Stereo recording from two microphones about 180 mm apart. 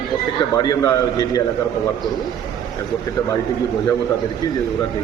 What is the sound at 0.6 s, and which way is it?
Speech, 20° left (ahead or behind).